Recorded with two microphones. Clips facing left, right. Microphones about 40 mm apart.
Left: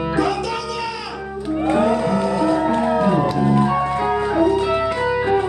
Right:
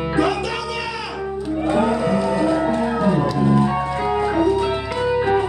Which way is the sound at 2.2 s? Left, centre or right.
Centre.